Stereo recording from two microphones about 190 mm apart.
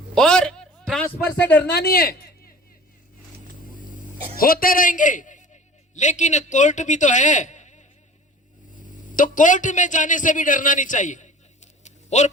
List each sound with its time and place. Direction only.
0.1 s a sound: 5° left (ahead or behind)
1.3 s speech: 10° left (ahead or behind)
1.6 s a man's voice: 55° left (ahead or behind)
3.4 s vehicle: 45° left (ahead or behind)
4.4 s a man's voice: 50° left (ahead or behind)